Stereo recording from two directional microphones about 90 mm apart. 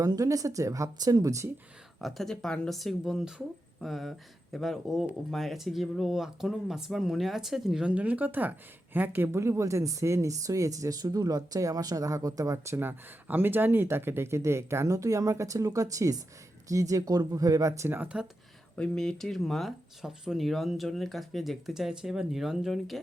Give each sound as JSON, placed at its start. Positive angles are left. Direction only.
{"t": 0.0, "sound": "speech", "side_deg": -40}
{"t": 2.0, "sound": "speech", "side_deg": 0}
{"t": 12.7, "sound": "speech", "side_deg": -20}
{"t": 18.8, "sound": "speech", "side_deg": 5}